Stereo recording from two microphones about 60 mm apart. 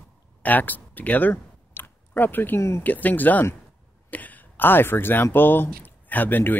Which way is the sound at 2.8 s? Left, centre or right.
Left.